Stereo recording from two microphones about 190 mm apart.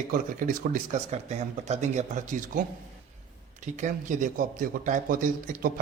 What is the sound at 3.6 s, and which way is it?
A man's voice, 40° right (ahead or behind).